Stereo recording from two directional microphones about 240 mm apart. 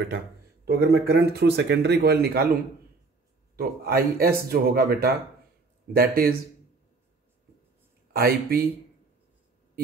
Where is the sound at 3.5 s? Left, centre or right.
Right.